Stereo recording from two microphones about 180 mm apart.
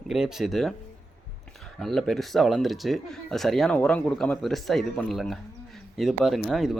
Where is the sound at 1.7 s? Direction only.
Centre (ahead or behind).